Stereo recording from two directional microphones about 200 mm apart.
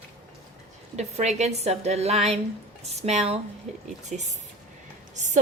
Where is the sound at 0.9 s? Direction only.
35° right (ahead or behind).